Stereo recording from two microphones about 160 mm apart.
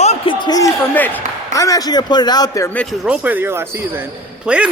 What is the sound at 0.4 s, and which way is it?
Speech, 25° left (ahead or behind).